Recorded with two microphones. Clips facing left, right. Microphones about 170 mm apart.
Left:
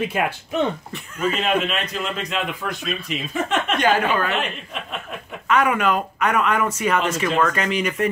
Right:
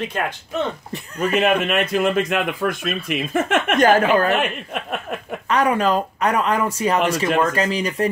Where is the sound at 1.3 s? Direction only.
55° right (ahead or behind).